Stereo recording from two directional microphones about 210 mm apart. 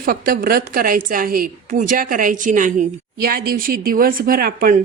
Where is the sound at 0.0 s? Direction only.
45° right (ahead or behind).